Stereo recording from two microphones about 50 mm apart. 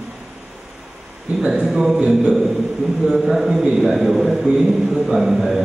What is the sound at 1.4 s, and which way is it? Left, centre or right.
A man's voice, centre.